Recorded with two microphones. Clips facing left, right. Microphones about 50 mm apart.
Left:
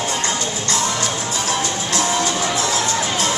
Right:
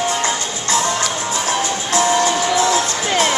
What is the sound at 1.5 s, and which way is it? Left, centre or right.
Music, right.